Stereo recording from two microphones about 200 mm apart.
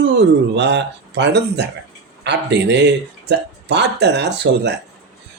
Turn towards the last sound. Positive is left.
turn(degrees=-60)  # may be behind; listen again after turning